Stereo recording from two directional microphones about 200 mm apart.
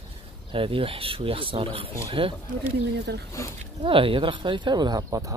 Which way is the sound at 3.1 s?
55° right (ahead or behind).